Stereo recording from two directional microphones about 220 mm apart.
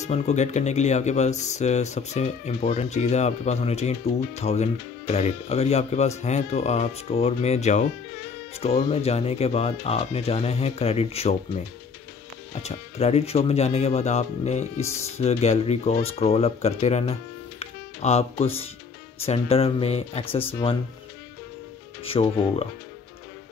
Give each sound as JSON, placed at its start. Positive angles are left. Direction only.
{"t": 0.0, "sound": "speech", "side_deg": 30}
{"t": 12.6, "sound": "speech", "side_deg": 30}
{"t": 22.0, "sound": "speech", "side_deg": 25}